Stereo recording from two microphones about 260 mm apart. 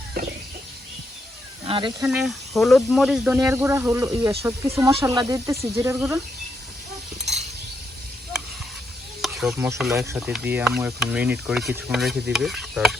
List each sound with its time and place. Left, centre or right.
1.6 s speech: centre
2.0 s speech: centre
9.2 s speech: centre